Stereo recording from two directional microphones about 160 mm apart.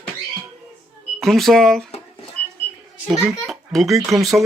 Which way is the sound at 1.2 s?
Centre (ahead or behind).